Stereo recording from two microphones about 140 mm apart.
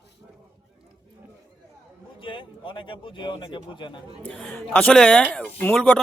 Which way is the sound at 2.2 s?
35° left (ahead or behind).